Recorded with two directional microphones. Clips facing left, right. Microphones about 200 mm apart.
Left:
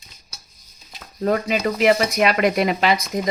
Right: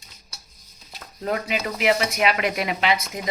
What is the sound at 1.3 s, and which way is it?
Speech, 40° left (ahead or behind).